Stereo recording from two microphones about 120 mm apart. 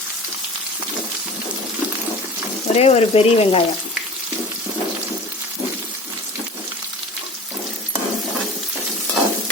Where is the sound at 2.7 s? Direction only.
60° left (ahead or behind).